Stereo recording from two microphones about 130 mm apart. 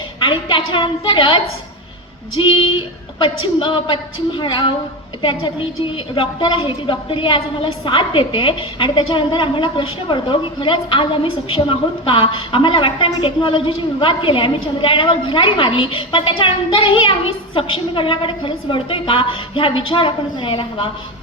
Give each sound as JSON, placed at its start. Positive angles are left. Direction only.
{"t": 0.2, "sound": "a woman's voice", "side_deg": 40}
{"t": 2.4, "sound": "a woman's voice", "side_deg": 40}